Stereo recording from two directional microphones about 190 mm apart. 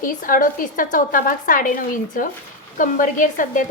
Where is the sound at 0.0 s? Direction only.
45° left (ahead or behind).